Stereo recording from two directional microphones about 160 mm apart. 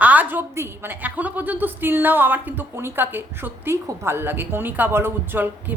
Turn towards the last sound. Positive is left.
turn(degrees=-15)  # may be behind; listen again after turning